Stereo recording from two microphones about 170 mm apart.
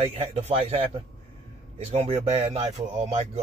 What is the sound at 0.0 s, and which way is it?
Speech, 35° right (ahead or behind).